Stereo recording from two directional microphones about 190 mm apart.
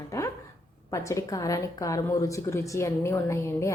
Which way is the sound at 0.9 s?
15° left (ahead or behind).